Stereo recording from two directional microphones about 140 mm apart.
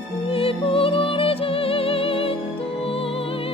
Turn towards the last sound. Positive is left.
turn(degrees=40)  # may be behind; listen again after turning